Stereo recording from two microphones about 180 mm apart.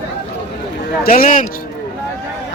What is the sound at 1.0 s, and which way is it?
Speech, 50° left (ahead or behind).